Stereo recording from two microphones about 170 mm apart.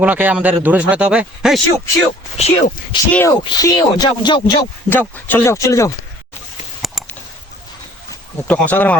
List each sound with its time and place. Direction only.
0.0 s speech: 10° right (ahead or behind)
2.4 s speech: 45° left (ahead or behind)
3.1 s speech: 10° left (ahead or behind)
3.4 s speech: 25° left (ahead or behind)
4.9 s speech: 10° left (ahead or behind)
6.8 s a sound: centre (ahead or behind)
8.4 s speech: 10° left (ahead or behind)